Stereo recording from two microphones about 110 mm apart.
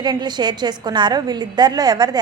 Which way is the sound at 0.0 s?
40° right (ahead or behind).